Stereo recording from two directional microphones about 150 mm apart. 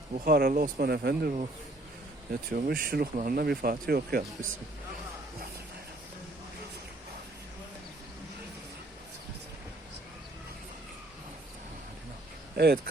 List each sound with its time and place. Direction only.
0.3 s speech: 90° right
2.3 s speech: 85° right
3.2 s speech: 75° right (ahead or behind); by 4.2 s 90° right
12.5 s speech: 90° right